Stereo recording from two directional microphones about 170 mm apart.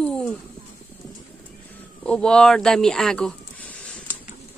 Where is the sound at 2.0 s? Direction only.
5° left (ahead or behind).